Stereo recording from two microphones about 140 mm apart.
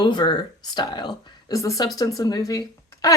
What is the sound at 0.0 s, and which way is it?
Speech, 30° left (ahead or behind).